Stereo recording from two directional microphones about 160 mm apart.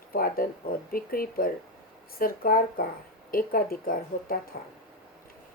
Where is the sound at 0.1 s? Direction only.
65° left (ahead or behind).